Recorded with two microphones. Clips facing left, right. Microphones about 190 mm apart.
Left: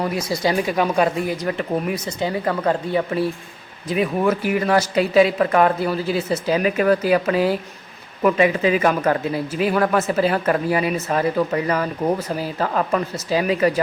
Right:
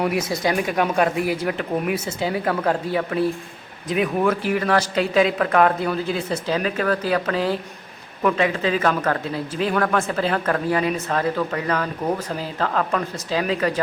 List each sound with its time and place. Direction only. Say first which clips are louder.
0.4 s a man's voice: left 3 dB; centre (ahead or behind)